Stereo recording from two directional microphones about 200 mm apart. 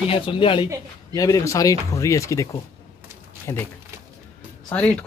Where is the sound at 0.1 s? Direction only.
25° left (ahead or behind).